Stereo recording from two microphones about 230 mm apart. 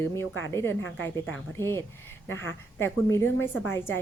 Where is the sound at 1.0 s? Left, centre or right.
Centre.